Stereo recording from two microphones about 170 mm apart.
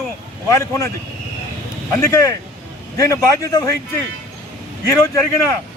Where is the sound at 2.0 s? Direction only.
15° left (ahead or behind).